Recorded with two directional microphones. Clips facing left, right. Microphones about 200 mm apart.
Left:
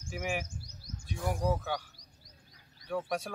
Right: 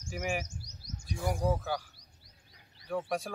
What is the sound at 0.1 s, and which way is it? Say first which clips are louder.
Speech: right 1 dB; centre (ahead or behind).